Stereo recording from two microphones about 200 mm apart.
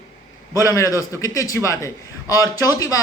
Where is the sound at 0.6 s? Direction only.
15° left (ahead or behind).